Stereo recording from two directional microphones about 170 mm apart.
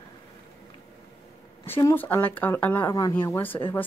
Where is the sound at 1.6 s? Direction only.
15° left (ahead or behind).